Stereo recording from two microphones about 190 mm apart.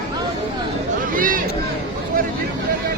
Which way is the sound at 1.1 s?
45° right (ahead or behind).